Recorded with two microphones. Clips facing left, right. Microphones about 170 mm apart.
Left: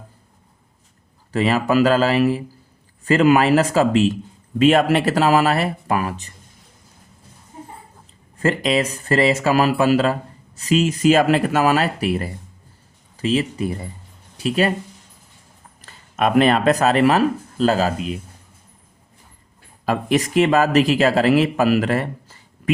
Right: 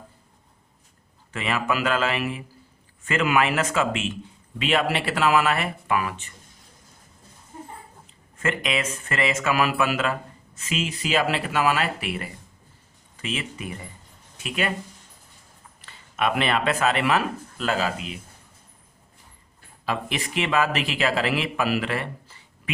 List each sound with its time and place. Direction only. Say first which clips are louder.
1.3 s speech: left 8 dB; 35° left (ahead or behind)
8.4 s speech: left 7 dB; 35° left (ahead or behind)
15.8 s speech: left 5 dB; 40° left (ahead or behind)
19.8 s speech: left 9 dB; 45° left (ahead or behind)